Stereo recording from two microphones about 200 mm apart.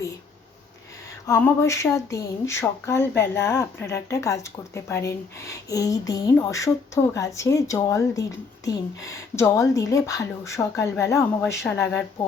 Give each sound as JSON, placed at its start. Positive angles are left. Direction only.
{"t": 1.3, "sound": "speech", "side_deg": 15}